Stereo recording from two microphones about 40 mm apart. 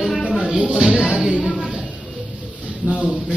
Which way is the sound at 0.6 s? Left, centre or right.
Right.